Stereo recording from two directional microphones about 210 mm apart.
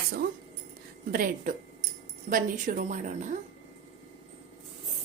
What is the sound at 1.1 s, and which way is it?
A woman's voice, 40° right (ahead or behind).